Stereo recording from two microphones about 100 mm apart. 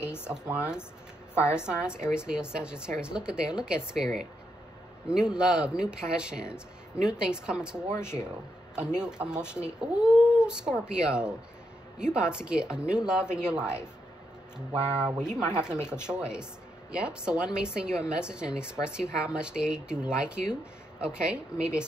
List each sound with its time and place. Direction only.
0.0 s speech: 25° left (ahead or behind)
1.3 s a woman's voice: 25° left (ahead or behind)
1.7 s speech: 10° right (ahead or behind)